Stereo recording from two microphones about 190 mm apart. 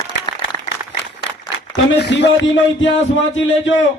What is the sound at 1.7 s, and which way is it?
Speech, 65° left (ahead or behind).